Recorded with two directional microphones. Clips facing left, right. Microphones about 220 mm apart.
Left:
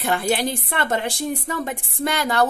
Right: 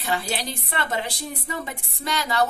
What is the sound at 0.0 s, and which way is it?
A woman's voice, 55° left (ahead or behind).